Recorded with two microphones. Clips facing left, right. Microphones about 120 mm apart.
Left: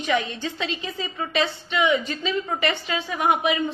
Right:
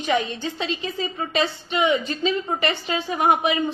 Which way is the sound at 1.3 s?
25° right (ahead or behind).